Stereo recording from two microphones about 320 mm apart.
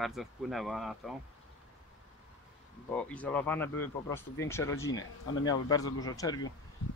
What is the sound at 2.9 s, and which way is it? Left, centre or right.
Speech, centre.